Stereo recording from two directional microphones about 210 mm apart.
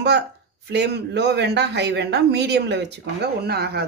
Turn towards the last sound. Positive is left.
turn(degrees=-50)  # may be behind; listen again after turning